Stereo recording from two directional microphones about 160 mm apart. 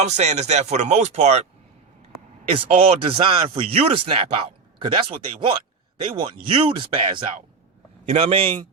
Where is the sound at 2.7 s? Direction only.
40° right (ahead or behind).